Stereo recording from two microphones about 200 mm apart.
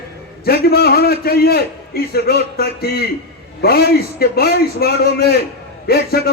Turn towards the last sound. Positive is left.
turn(degrees=50)  # may be behind; listen again after turning